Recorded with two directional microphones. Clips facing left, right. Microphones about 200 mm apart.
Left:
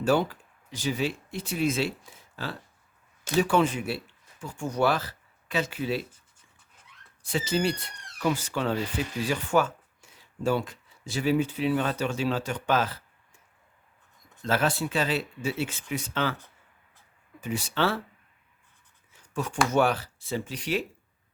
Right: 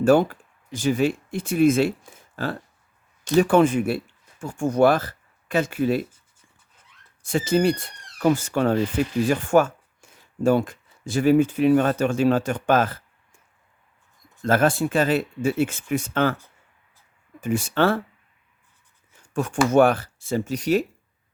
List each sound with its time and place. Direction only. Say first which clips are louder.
0.0 s speech: right 7 dB; 50° right (ahead or behind)
7.2 s speech: right 7 dB; 50° right (ahead or behind)
14.4 s speech: right 7 dB; 50° right (ahead or behind)
17.4 s speech: right 7 dB; 50° right (ahead or behind)
19.1 s writing: right 6 dB; 50° right (ahead or behind)
19.7 s speech: right 8 dB; 50° right (ahead or behind)